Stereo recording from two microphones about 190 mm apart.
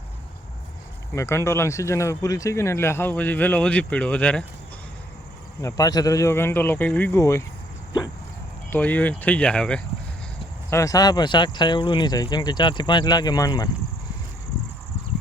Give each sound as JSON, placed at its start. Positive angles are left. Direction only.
{"t": 1.1, "sound": "speech", "side_deg": 15}
{"t": 5.6, "sound": "speech", "side_deg": 20}
{"t": 8.7, "sound": "speech", "side_deg": 10}
{"t": 10.7, "sound": "speech", "side_deg": 15}